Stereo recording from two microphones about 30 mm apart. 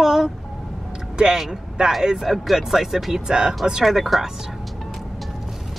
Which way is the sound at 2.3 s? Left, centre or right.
Centre.